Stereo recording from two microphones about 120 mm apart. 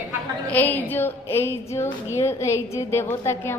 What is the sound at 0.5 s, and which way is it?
A woman's voice, 15° left (ahead or behind).